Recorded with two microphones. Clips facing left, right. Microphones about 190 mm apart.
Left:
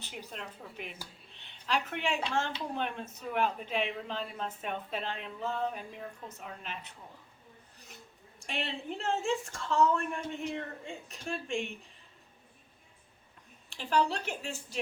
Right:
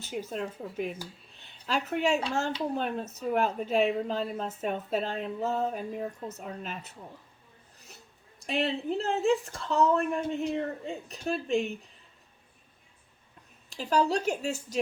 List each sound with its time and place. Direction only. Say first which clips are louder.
0.0 s speech: right 10 dB; 45° right (ahead or behind)
8.4 s speech: right 8 dB; 35° right (ahead or behind)
13.7 s speech: right 3 dB; 40° right (ahead or behind)